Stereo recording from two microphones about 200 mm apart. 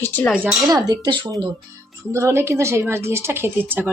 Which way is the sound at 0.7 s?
20° right (ahead or behind).